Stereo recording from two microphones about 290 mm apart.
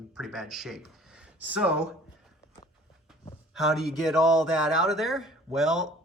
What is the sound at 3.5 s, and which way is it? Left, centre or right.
Speech, centre.